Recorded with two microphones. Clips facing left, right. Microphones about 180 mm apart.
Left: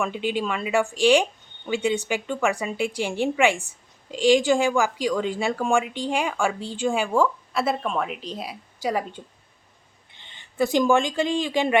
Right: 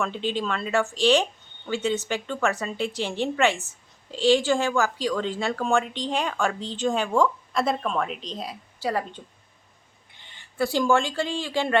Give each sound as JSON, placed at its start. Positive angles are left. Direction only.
{"t": 0.0, "sound": "speech", "side_deg": 10}
{"t": 10.2, "sound": "speech", "side_deg": 20}